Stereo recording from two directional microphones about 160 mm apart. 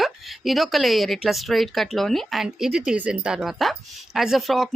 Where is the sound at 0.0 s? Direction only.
Centre (ahead or behind).